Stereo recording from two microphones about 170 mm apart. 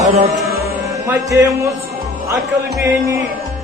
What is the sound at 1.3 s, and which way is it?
Speech, 15° right (ahead or behind).